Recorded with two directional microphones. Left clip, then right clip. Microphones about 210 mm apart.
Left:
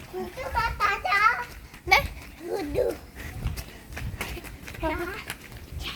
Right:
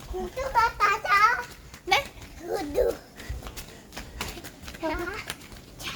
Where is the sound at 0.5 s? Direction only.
20° right (ahead or behind).